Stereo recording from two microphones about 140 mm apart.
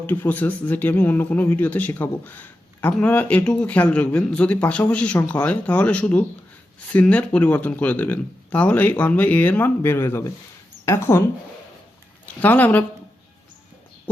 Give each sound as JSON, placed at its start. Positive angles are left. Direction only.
{"t": 0.0, "sound": "speech", "side_deg": 15}
{"t": 12.2, "sound": "speech", "side_deg": 10}